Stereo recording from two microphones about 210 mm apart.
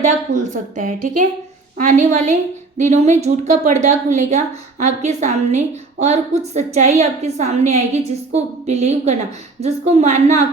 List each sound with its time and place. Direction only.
0.3 s a woman's voice: 35° right (ahead or behind)